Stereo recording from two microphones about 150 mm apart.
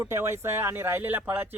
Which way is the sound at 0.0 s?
15° right (ahead or behind).